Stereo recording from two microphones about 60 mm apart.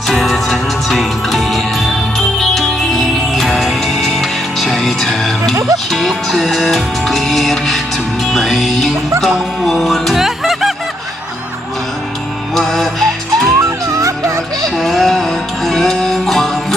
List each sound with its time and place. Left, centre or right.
0.1 s music: centre
12.5 s music: centre
13.6 s music: right
14.8 s music: centre